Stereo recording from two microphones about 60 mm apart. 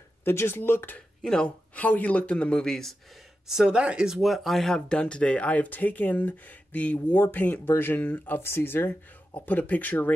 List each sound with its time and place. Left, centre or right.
0.2 s speech: left
1.2 s speech: centre
1.8 s speech: left
2.6 s speech: centre
3.4 s speech: centre; by 8.9 s left
9.5 s speech: left